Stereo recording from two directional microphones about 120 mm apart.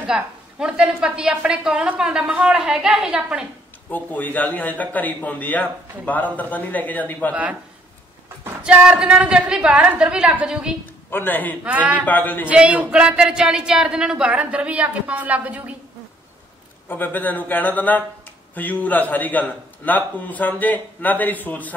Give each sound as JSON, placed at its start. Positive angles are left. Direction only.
{"t": 0.0, "sound": "a woman's voice", "side_deg": -5}
{"t": 3.9, "sound": "a man's voice", "side_deg": 15}
{"t": 8.6, "sound": "a woman's voice", "side_deg": -5}
{"t": 11.1, "sound": "a man's voice", "side_deg": 15}
{"t": 11.6, "sound": "a woman's voice", "side_deg": -15}
{"t": 12.0, "sound": "a man's voice", "side_deg": 15}
{"t": 12.4, "sound": "a woman's voice", "side_deg": -10}
{"t": 16.9, "sound": "a man's voice", "side_deg": 15}